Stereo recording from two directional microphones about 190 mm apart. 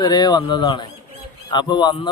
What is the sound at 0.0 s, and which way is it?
A man's voice, 25° left (ahead or behind).